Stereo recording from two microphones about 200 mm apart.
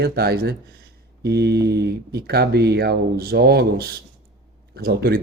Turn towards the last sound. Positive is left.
turn(degrees=-50)  # may be behind; listen again after turning